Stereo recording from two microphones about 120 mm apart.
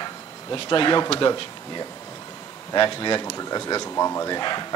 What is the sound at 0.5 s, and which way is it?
Speech, 40° left (ahead or behind).